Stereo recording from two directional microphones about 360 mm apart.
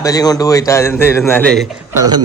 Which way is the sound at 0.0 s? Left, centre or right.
Centre.